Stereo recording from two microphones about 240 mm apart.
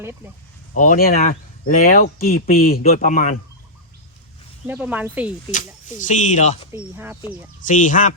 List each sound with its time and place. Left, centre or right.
0.7 s speech: left
4.6 s speech: centre
5.5 s speech: left
6.7 s speech: centre
7.6 s speech: left